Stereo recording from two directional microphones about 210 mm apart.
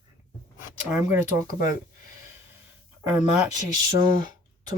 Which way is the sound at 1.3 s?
35° left (ahead or behind).